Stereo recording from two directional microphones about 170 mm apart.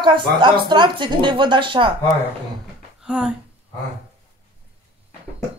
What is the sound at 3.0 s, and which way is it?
Speech, 5° right (ahead or behind).